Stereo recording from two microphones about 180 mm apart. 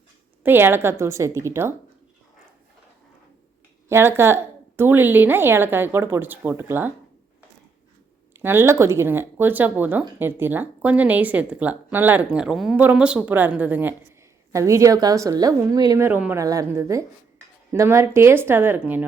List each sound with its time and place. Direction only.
0.4 s speech: 10° right (ahead or behind)
3.8 s speech: 15° right (ahead or behind)
8.3 s speech: 10° right (ahead or behind)